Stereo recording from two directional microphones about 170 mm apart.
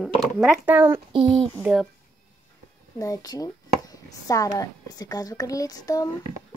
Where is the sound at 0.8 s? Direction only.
25° right (ahead or behind).